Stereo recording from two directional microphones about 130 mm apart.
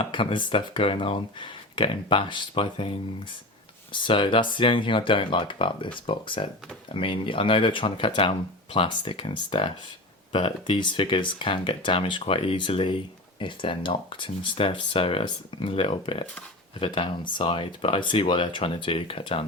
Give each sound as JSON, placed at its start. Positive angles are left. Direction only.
{"t": 0.0, "sound": "speech", "side_deg": 40}
{"t": 4.0, "sound": "speech", "side_deg": 40}